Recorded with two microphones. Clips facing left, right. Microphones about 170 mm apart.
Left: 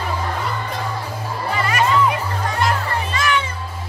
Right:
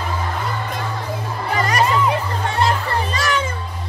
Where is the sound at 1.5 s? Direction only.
40° right (ahead or behind).